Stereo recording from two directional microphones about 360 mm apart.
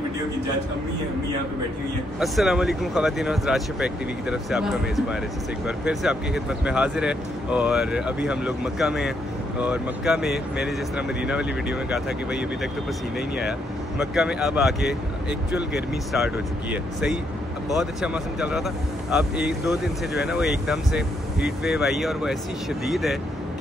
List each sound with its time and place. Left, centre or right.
2.1 s speech: centre
16.7 s speech: centre